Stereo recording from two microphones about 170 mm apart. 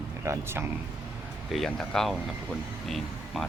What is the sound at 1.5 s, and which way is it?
Speech, centre (ahead or behind).